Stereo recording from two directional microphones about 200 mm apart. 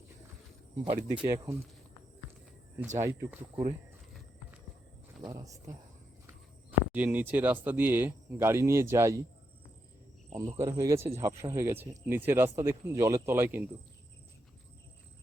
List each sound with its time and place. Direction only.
0.9 s speech: 25° right (ahead or behind)
3.0 s speech: 15° right (ahead or behind)
5.3 s speech: 15° right (ahead or behind)
10.3 s speech: 20° right (ahead or behind)